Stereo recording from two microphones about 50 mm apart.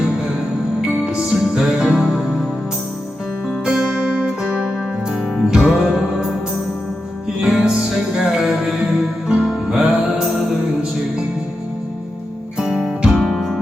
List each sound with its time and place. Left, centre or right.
0.8 s music: centre
3.7 s music: right
5.0 s music: centre
7.4 s music: centre
12.5 s music: centre
13.1 s music: centre